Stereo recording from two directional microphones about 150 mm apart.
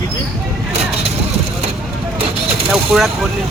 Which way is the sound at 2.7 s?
Centre (ahead or behind).